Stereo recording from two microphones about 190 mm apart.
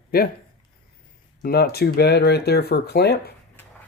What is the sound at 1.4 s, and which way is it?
Speech, 55° left (ahead or behind).